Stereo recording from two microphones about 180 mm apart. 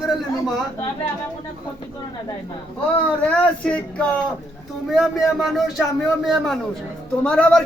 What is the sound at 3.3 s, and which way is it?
A man's voice, 5° left (ahead or behind).